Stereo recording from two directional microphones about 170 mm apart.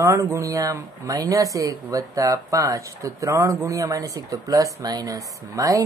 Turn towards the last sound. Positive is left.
turn(degrees=-20)  # may be behind; listen again after turning